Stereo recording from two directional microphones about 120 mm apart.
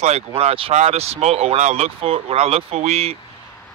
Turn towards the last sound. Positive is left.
turn(degrees=-60)  # may be behind; listen again after turning